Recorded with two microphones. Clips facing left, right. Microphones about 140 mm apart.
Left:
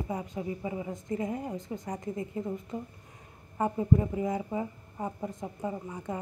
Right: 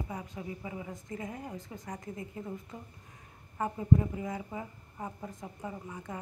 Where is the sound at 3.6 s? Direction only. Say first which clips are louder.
Left 2 dB; 20° left (ahead or behind).